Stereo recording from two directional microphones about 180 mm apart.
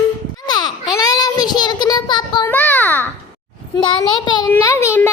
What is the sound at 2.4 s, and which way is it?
Speech, 10° left (ahead or behind).